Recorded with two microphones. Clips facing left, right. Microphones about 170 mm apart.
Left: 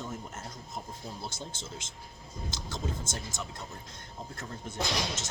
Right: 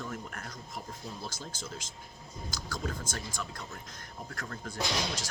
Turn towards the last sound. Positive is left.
turn(degrees=25)  # may be behind; listen again after turning